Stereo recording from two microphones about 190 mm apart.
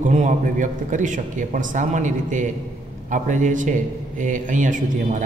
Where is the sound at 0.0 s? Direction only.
40° right (ahead or behind).